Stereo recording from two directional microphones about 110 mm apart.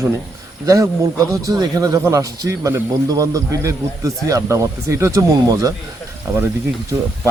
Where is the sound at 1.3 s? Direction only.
35° right (ahead or behind).